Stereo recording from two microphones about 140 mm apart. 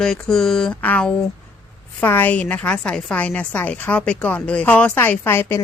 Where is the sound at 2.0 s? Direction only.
15° left (ahead or behind).